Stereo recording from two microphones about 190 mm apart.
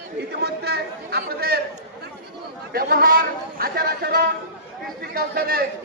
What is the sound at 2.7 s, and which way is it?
A man's voice, 55° right (ahead or behind).